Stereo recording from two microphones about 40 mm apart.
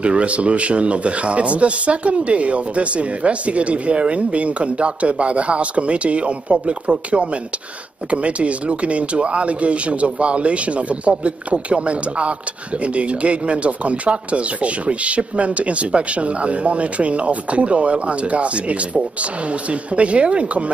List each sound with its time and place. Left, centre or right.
0.0 s speech: right